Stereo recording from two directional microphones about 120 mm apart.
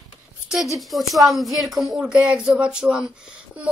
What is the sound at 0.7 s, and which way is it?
A woman's voice, centre (ahead or behind).